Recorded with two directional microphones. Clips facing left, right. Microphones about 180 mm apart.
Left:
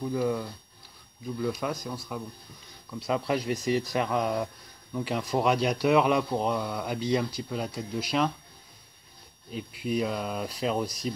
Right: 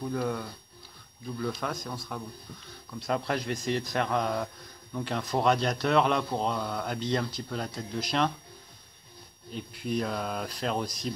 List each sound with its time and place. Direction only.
0.0 s speech: 5° left (ahead or behind)
9.5 s speech: 5° left (ahead or behind)